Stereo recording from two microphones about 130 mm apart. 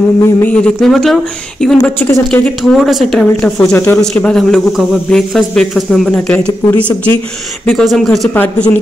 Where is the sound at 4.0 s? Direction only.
5° left (ahead or behind).